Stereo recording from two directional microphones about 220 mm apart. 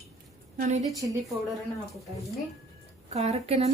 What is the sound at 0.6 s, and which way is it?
Speech, 30° right (ahead or behind).